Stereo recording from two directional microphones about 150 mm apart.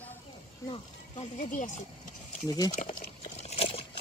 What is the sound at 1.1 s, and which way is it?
Speech, 50° left (ahead or behind).